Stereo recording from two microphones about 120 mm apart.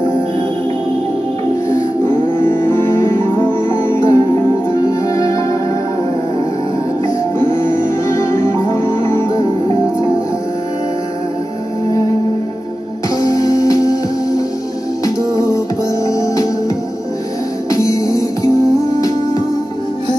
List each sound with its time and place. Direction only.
2.7 s music: 20° left (ahead or behind)
8.8 s music: 25° left (ahead or behind)
13.2 s music: 30° left (ahead or behind)
16.1 s music: 30° left (ahead or behind)